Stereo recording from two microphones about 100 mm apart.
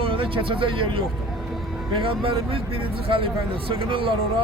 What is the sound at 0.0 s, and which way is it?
Speech, 65° right (ahead or behind).